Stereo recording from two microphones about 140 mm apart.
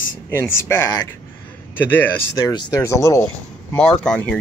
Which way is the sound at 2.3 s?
25° left (ahead or behind).